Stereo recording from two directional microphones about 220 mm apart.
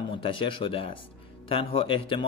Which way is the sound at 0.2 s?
25° left (ahead or behind).